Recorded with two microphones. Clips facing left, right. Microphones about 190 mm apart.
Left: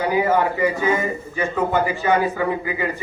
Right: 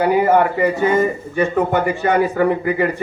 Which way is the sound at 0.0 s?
60° right (ahead or behind).